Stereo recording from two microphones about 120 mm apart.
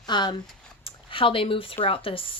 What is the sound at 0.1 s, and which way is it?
A woman's voice, 40° left (ahead or behind).